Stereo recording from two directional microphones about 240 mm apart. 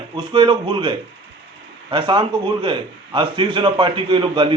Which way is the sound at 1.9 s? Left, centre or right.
Centre.